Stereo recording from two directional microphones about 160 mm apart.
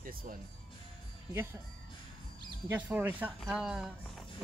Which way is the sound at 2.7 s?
10° right (ahead or behind).